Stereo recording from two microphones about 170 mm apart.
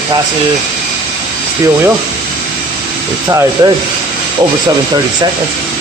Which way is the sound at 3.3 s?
20° right (ahead or behind).